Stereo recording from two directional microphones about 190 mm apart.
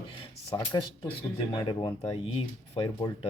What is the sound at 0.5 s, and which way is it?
Speech, 20° left (ahead or behind).